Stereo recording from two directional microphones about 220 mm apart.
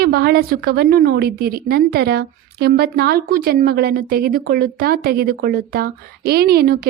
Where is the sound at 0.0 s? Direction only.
45° right (ahead or behind).